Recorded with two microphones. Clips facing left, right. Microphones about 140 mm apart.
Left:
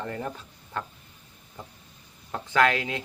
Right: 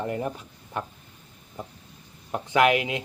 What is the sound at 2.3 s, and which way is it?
Speech, 15° right (ahead or behind).